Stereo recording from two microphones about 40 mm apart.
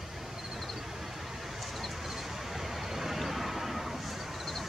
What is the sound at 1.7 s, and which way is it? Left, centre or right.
Vehicle, centre.